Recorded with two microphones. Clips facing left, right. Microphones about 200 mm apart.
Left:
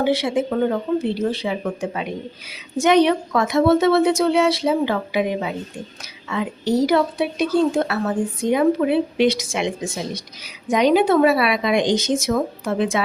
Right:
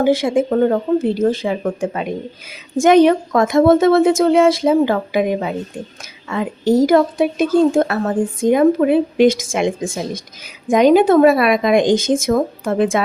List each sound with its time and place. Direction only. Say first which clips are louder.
0.0 s speech: right 5 dB; 50° right (ahead or behind)